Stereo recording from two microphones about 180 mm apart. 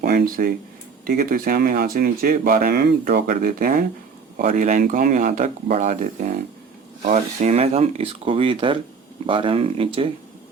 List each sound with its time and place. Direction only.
0.0 s speech: 55° right (ahead or behind); by 10.1 s 30° right (ahead or behind)